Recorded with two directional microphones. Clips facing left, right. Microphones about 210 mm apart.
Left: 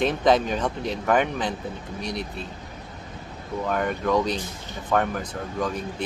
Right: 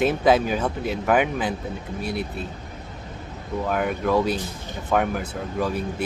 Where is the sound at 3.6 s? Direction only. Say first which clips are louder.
Right 1 dB; 5° right (ahead or behind).